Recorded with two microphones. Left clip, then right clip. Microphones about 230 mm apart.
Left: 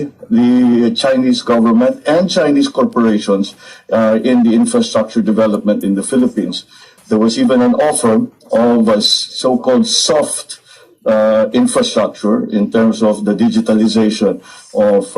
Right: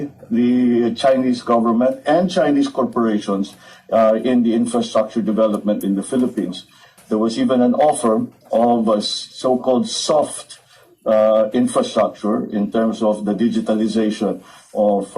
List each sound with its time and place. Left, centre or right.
0.3 s speech: left